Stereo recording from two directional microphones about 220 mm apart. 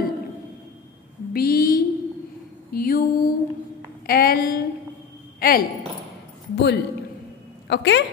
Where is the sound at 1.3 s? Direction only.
45° left (ahead or behind).